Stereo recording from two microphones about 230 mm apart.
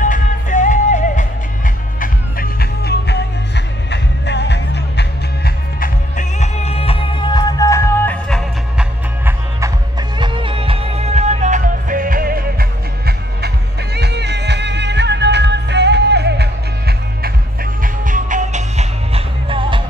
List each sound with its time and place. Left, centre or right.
0.0 s music: left; by 8.8 s centre
9.2 s music: centre; by 17.3 s right
17.8 s music: right